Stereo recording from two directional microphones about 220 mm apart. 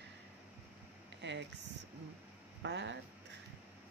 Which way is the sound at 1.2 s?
55° right (ahead or behind).